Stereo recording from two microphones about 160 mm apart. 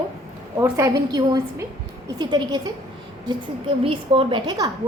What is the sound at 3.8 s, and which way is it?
Speech, 35° right (ahead or behind).